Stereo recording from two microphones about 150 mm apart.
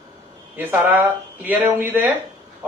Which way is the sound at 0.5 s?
15° right (ahead or behind).